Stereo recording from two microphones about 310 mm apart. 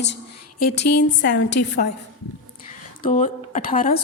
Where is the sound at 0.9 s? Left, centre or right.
Left.